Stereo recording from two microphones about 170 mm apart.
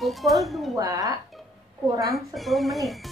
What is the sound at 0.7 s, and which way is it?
Speech, 20° right (ahead or behind).